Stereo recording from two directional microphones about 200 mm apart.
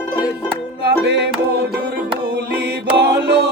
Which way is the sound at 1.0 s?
60° right (ahead or behind).